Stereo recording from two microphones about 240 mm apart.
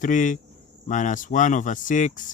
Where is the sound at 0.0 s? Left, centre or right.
Left.